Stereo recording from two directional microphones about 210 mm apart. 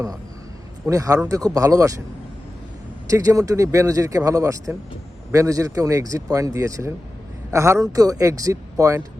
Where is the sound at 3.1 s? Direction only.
15° right (ahead or behind).